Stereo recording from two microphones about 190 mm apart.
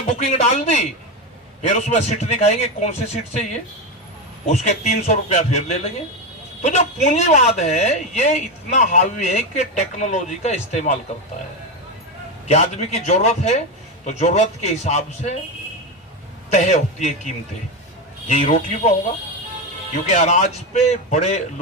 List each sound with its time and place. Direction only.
0.3 s speech: 40° left (ahead or behind)
4.4 s speech: 35° left (ahead or behind)
12.5 s speech: 35° left (ahead or behind)
16.5 s speech: 35° left (ahead or behind)
20.1 s speech: 40° left (ahead or behind)